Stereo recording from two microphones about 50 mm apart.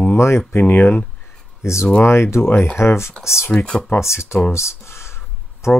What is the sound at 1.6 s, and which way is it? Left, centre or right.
Speech, left.